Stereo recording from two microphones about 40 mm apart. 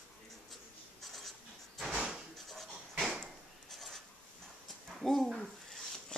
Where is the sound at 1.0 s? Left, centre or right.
Centre.